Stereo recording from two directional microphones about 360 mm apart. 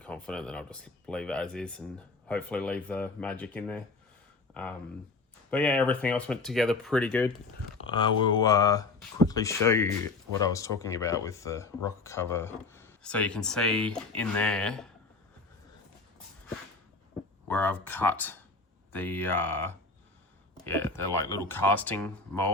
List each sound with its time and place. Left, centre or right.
0.0 s speech: centre
5.5 s speech: centre
17.5 s speech: centre